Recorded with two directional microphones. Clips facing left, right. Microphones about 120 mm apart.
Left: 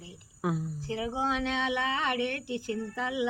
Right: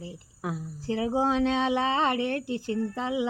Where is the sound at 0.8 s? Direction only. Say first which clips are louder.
Right 6 dB; 35° right (ahead or behind).